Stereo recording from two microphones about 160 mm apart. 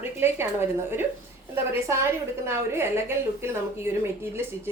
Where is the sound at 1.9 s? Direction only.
15° right (ahead or behind).